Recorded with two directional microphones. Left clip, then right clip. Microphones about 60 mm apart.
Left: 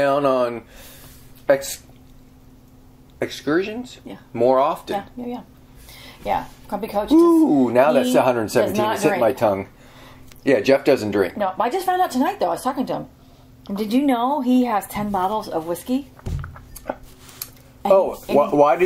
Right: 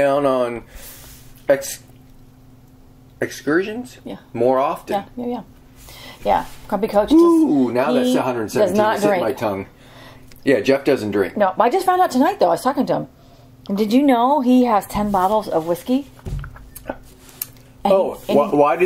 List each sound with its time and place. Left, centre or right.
0.0 s speech: centre
3.2 s speech: centre
4.9 s a woman's voice: centre
8.1 s speech: centre
9.4 s speech: centre
11.3 s a woman's voice: centre
16.3 s a sound: centre
17.8 s speech: centre
18.5 s speech: centre